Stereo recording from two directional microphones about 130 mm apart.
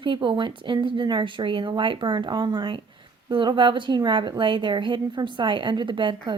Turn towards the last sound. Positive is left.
turn(degrees=-40)  # may be behind; listen again after turning